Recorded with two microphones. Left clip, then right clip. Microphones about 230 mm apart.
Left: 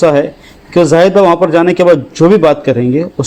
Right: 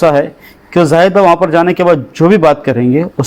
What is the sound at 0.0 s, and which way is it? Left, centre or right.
A man's voice, right.